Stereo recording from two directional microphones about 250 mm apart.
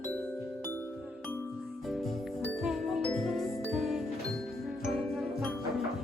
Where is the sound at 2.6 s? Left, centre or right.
Centre.